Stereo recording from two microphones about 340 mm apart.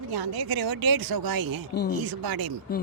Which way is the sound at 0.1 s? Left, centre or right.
Right.